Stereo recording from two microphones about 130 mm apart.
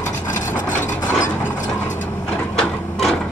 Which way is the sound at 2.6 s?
5° left (ahead or behind).